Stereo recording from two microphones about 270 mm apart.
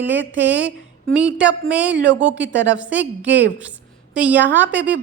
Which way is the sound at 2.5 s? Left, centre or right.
Right.